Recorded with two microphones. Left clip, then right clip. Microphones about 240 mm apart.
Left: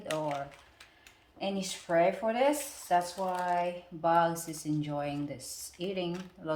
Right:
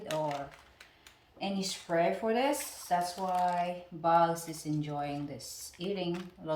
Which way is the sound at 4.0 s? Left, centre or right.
Centre.